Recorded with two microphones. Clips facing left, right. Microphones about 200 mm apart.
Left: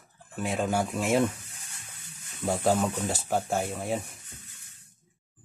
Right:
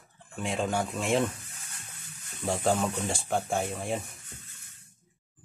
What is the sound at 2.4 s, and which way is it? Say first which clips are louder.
Speech: left 2 dB; 5° left (ahead or behind).